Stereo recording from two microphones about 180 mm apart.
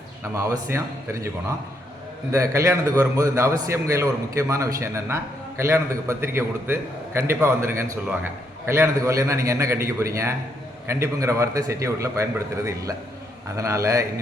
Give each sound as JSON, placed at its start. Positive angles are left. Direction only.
{"t": 0.3, "sound": "a man's voice", "side_deg": -15}